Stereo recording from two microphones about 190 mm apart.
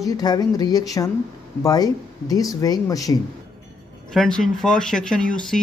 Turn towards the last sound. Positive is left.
turn(degrees=5)  # may be behind; listen again after turning